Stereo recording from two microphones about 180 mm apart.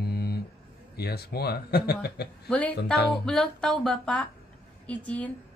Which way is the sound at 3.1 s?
5° left (ahead or behind).